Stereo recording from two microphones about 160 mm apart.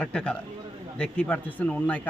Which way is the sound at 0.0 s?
5° left (ahead or behind).